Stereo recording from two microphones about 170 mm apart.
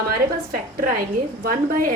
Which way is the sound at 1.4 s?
55° right (ahead or behind).